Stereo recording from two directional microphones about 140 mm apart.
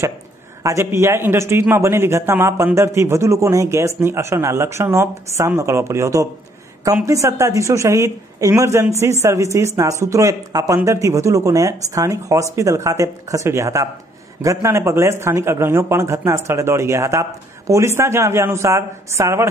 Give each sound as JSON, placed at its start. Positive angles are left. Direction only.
{"t": 0.7, "sound": "speech", "side_deg": -20}